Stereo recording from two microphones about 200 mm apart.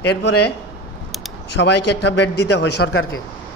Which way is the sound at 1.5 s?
60° left (ahead or behind).